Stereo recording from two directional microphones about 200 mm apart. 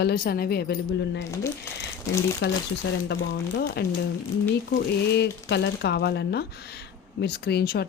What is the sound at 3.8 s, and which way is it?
Speech, 50° left (ahead or behind).